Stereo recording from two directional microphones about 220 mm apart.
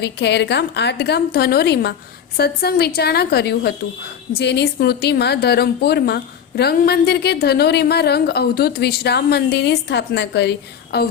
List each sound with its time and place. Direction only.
0.0 s a woman's voice: 50° left (ahead or behind)